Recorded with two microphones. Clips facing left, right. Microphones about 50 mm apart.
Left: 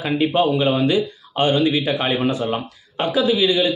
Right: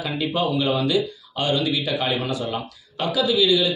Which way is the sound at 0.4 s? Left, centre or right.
Left.